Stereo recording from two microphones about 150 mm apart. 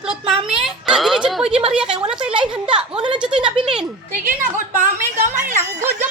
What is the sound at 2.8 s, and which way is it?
Speech, 5° right (ahead or behind).